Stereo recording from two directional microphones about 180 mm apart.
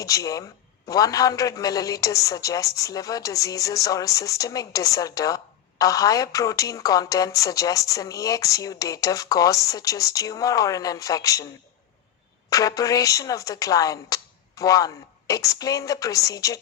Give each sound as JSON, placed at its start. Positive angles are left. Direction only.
{"t": 0.0, "sound": "a woman's voice", "side_deg": 20}
{"t": 12.5, "sound": "a woman's voice", "side_deg": 20}